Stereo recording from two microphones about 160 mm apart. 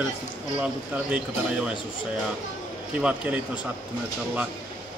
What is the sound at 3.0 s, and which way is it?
Speech, 10° right (ahead or behind).